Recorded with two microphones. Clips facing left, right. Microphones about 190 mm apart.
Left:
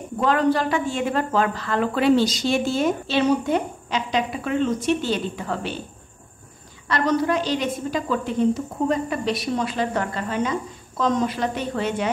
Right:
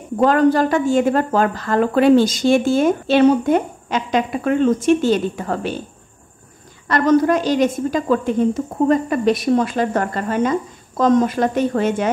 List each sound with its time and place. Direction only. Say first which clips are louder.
0.2 s a woman's voice: right 6 dB; 45° right (ahead or behind)
6.9 s a woman's voice: right 6 dB; 45° right (ahead or behind)